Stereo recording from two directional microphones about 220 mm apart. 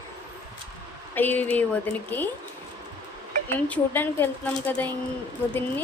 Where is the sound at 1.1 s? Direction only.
10° left (ahead or behind).